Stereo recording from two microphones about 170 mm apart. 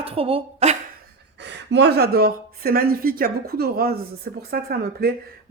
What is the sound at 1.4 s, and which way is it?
A woman's voice, 90° right.